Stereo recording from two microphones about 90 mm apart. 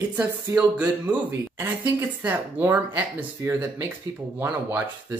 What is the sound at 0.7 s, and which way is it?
Speech, 15° right (ahead or behind).